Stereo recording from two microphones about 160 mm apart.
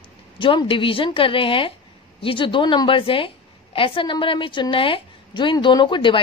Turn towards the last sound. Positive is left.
turn(degrees=30)  # may be behind; listen again after turning